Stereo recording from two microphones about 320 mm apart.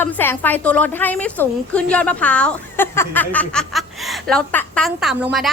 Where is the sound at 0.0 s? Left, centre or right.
Centre.